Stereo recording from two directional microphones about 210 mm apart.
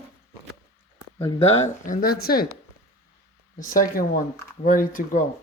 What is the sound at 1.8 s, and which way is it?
Speech, 40° left (ahead or behind).